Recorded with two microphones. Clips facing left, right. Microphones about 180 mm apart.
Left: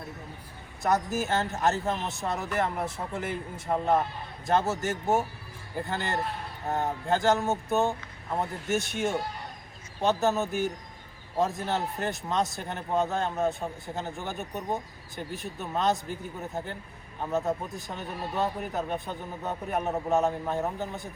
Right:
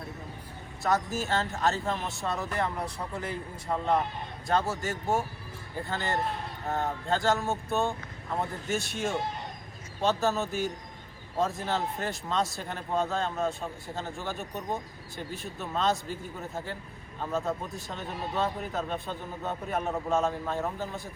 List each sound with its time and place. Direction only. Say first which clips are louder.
0.8 s a man's voice: left 2 dB; 20° left (ahead or behind)